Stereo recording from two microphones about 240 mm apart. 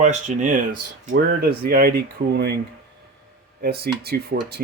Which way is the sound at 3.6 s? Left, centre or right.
Right.